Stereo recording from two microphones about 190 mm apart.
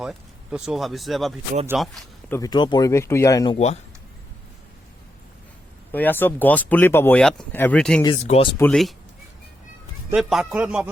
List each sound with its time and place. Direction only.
0.0 s a man's voice: 5° right (ahead or behind)
2.3 s speech: 20° left (ahead or behind)
5.9 s speech: 10° left (ahead or behind)
8.0 s speech: 30° left (ahead or behind)
8.5 s a man's voice: 5° left (ahead or behind)
10.1 s a man's voice: centre (ahead or behind)